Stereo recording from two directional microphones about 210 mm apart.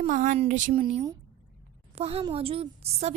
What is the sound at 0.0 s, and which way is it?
Speech, 35° right (ahead or behind).